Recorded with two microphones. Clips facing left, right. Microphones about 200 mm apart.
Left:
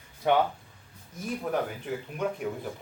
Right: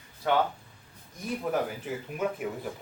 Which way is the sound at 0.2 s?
20° left (ahead or behind).